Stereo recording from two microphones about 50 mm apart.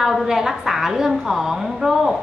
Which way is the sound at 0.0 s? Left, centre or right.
Centre.